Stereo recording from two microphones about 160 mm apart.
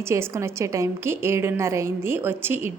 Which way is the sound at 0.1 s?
15° right (ahead or behind).